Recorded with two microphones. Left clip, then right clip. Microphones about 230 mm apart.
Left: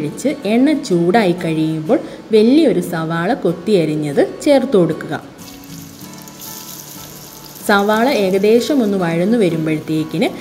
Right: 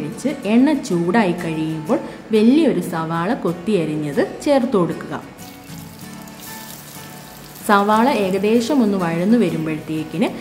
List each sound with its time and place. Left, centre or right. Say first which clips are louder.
0.2 s speech: left 2 dB; centre
7.6 s speech: left 1 dB; centre